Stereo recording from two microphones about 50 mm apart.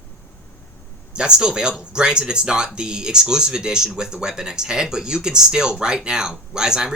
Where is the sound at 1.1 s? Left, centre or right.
Centre.